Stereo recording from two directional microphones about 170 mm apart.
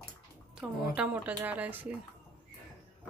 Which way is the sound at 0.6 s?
5° right (ahead or behind).